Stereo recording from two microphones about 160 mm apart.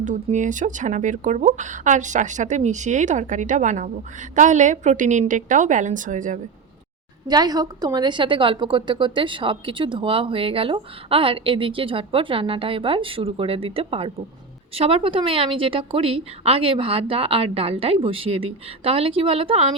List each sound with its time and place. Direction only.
0.0 s a woman's voice: 50° right (ahead or behind)
7.3 s a woman's voice: 25° right (ahead or behind)